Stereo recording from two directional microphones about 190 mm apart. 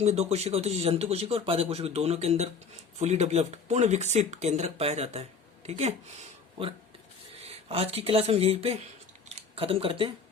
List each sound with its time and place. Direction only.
0.0 s speech: 35° right (ahead or behind)
7.4 s speech: 30° right (ahead or behind)